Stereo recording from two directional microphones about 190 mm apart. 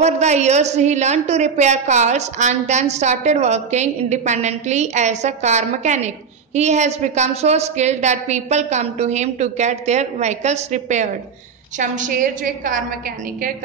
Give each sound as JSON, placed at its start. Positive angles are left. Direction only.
{"t": 0.0, "sound": "a woman's voice", "side_deg": -35}